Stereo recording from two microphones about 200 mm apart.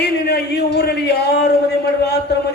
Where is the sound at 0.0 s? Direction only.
55° left (ahead or behind).